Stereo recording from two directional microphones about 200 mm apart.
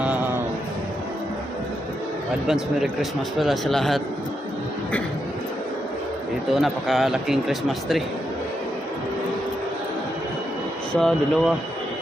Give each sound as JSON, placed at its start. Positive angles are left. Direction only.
{"t": 2.5, "sound": "a man's voice", "side_deg": 0}
{"t": 6.5, "sound": "a man's voice", "side_deg": 0}
{"t": 10.9, "sound": "a man's voice", "side_deg": 0}